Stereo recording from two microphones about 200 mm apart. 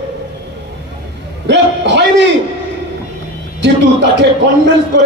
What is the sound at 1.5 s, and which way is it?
Speech, 60° right (ahead or behind).